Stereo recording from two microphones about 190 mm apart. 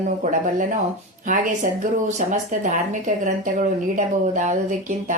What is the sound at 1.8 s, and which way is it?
Speech, 40° right (ahead or behind).